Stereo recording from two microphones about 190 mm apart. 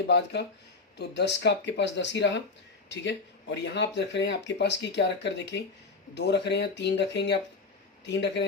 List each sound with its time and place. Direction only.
0.9 s speech: 65° left (ahead or behind)